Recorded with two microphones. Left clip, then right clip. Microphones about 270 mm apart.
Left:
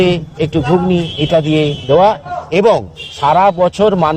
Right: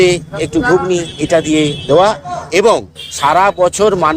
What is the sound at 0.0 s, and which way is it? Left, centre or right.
Speech, left.